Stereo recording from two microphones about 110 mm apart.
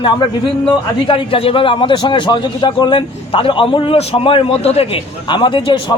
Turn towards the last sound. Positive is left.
turn(degrees=50)  # may be behind; listen again after turning